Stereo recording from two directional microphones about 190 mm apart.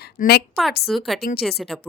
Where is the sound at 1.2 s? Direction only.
55° left (ahead or behind).